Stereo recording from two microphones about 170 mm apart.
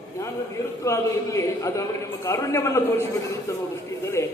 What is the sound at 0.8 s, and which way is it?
A man's voice, 15° left (ahead or behind).